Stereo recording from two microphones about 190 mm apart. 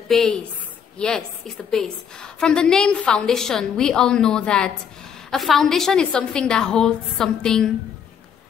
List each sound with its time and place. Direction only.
0.1 s a woman's voice: 5° left (ahead or behind)